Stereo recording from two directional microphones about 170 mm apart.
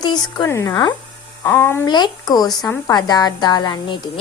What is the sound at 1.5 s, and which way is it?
Speech, 15° left (ahead or behind).